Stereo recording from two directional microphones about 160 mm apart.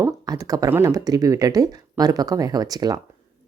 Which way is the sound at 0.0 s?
20° right (ahead or behind).